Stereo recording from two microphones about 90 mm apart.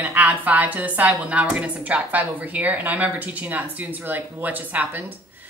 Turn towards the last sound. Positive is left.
turn(degrees=-20)  # may be behind; listen again after turning